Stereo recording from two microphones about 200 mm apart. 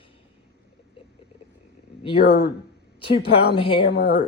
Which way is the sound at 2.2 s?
55° left (ahead or behind).